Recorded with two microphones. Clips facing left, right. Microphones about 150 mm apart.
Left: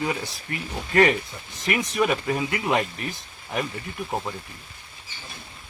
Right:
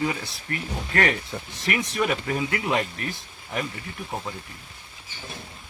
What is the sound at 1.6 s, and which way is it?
Speech, 20° left (ahead or behind).